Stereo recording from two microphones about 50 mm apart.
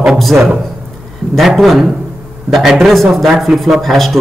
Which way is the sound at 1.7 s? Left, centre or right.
Centre.